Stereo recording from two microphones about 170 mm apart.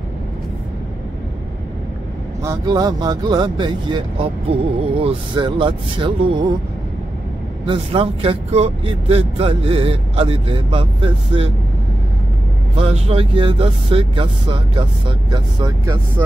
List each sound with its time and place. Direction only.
2.4 s speech: 20° right (ahead or behind)
7.6 s speech: 30° right (ahead or behind)
12.7 s speech: 35° right (ahead or behind)